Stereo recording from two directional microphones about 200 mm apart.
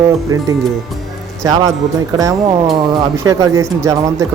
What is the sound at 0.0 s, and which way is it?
Speech, 15° right (ahead or behind).